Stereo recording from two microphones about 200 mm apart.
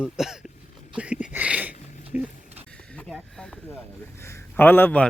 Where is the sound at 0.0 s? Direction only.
5° right (ahead or behind).